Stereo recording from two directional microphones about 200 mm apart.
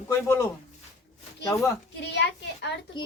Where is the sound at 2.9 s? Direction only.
25° left (ahead or behind).